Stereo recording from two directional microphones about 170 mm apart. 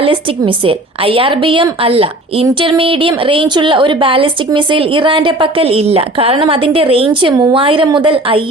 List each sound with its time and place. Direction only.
0.0 s a woman's voice: 30° right (ahead or behind)